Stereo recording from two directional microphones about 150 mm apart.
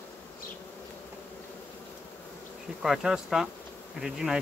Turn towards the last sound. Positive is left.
turn(degrees=-5)  # may be behind; listen again after turning